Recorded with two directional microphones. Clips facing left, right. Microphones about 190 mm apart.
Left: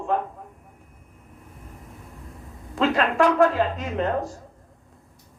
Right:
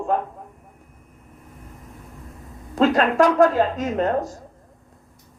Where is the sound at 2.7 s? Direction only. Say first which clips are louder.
Right 4 dB; 40° right (ahead or behind).